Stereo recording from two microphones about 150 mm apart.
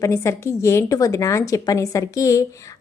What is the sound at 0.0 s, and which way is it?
A woman's voice, 20° left (ahead or behind).